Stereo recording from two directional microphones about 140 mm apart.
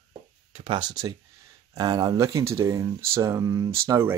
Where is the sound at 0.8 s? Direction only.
30° right (ahead or behind).